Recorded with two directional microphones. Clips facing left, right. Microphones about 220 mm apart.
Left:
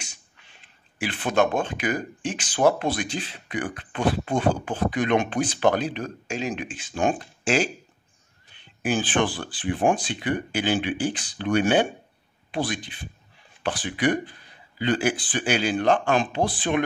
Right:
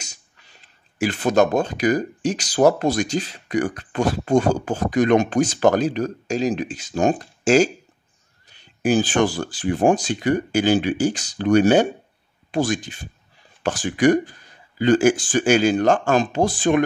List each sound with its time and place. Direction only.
0.0 s speech: 40° right (ahead or behind)